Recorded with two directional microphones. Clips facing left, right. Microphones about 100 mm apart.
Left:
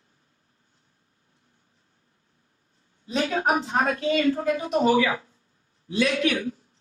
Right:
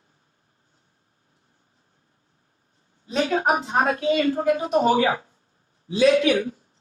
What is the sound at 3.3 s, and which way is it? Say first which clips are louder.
A woman's voice: right 2 dB; 30° right (ahead or behind).